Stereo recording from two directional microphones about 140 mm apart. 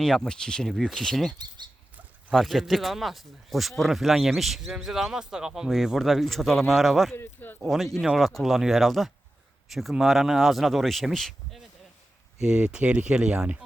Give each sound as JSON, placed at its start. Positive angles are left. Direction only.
{"t": 0.0, "sound": "speech", "side_deg": 5}
{"t": 1.4, "sound": "speech", "side_deg": -30}
{"t": 2.3, "sound": "speech", "side_deg": 0}
{"t": 7.2, "sound": "speech", "side_deg": 15}
{"t": 7.9, "sound": "speech", "side_deg": 0}